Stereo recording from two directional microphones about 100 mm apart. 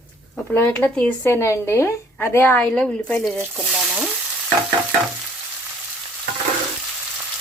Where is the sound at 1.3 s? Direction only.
25° left (ahead or behind).